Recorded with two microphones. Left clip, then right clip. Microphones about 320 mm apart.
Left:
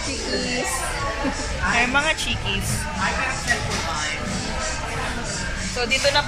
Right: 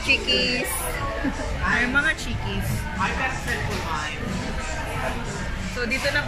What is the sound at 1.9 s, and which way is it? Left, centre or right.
Speech, centre.